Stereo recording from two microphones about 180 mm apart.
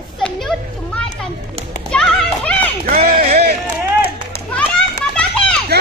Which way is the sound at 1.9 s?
5° left (ahead or behind).